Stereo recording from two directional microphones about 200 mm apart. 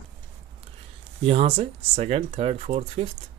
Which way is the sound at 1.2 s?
30° right (ahead or behind).